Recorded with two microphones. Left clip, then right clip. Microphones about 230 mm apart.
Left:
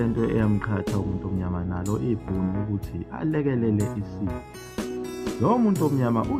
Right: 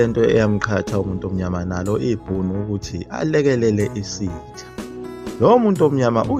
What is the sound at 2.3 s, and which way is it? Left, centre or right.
Speech, centre.